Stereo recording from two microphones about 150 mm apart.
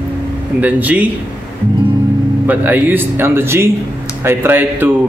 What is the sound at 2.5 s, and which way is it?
Speech, 10° right (ahead or behind).